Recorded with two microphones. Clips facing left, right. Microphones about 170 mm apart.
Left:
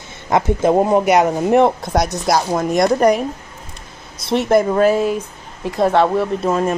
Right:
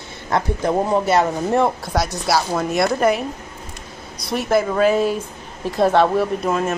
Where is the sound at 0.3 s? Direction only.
20° left (ahead or behind).